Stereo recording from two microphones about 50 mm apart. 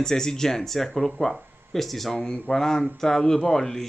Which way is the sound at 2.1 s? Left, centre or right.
Centre.